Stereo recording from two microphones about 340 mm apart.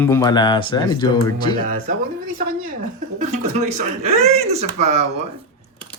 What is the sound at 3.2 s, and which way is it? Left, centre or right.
Speech, right.